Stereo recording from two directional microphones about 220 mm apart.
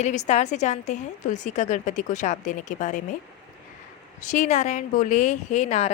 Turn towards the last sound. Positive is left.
turn(degrees=30)  # may be behind; listen again after turning